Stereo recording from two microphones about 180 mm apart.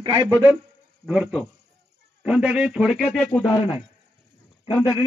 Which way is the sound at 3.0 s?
10° left (ahead or behind).